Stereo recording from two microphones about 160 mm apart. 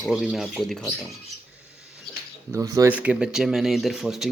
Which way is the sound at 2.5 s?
20° right (ahead or behind).